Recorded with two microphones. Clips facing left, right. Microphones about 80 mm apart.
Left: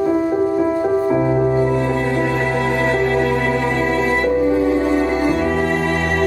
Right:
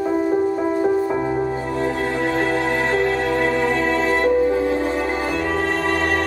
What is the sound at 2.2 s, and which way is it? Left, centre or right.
Music, right.